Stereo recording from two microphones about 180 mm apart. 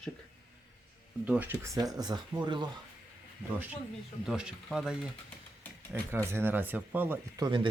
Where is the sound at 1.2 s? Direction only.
10° right (ahead or behind); by 2.7 s 25° right (ahead or behind).